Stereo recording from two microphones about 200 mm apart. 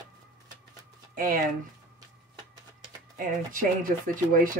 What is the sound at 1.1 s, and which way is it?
Speech, 45° right (ahead or behind).